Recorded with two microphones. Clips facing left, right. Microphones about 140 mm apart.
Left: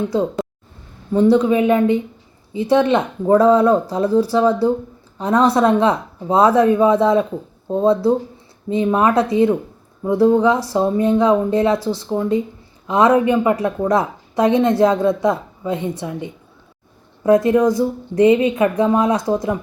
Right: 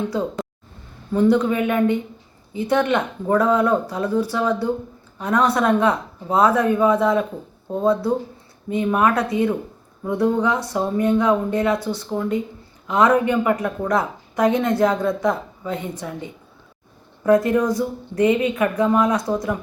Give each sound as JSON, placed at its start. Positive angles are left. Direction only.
{"t": 1.4, "sound": "a woman's voice", "side_deg": 25}